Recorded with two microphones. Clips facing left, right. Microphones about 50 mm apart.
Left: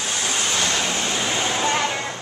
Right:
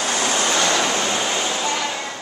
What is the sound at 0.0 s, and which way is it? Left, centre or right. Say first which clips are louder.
Vehicle: right 4 dB; right.